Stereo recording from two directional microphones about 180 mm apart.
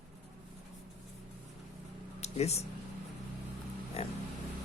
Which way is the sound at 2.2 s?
35° left (ahead or behind).